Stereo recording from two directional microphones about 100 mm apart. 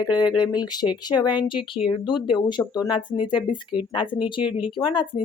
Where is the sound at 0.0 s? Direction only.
45° left (ahead or behind).